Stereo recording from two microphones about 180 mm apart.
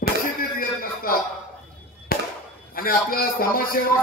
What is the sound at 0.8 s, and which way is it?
Speech, 55° left (ahead or behind).